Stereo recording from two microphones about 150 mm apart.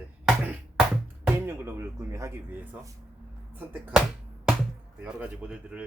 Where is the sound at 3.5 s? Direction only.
15° right (ahead or behind).